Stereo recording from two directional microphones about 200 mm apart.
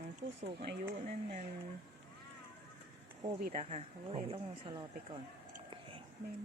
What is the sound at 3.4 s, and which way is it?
Speech, 35° right (ahead or behind).